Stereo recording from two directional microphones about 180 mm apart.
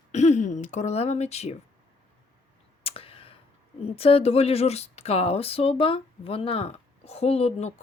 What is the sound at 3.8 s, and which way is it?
Speech, 35° left (ahead or behind).